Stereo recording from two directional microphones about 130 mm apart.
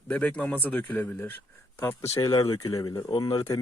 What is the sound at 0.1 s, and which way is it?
A man's voice, 10° left (ahead or behind).